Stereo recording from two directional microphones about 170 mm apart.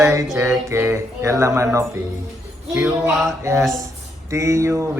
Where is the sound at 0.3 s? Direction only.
15° right (ahead or behind).